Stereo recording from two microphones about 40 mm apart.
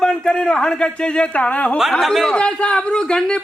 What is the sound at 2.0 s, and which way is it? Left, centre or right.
Speech, centre.